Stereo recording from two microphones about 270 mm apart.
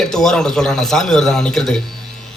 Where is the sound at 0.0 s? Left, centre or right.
Centre.